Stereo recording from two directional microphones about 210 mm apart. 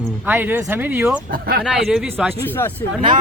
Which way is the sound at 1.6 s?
Centre (ahead or behind).